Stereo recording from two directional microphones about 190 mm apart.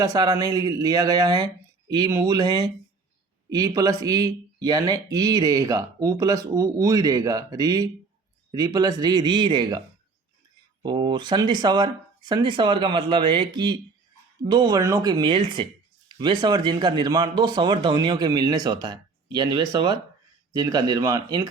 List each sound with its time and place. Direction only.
0.0 s speech: 20° right (ahead or behind)
3.8 s speech: 20° right (ahead or behind)
10.8 s speech: 25° right (ahead or behind)